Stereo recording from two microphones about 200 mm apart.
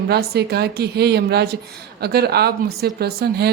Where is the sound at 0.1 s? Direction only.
55° right (ahead or behind).